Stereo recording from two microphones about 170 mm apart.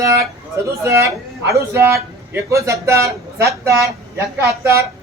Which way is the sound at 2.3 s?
15° right (ahead or behind).